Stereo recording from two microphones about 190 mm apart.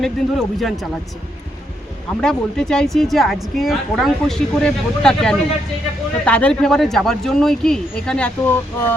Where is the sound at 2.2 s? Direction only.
5° left (ahead or behind).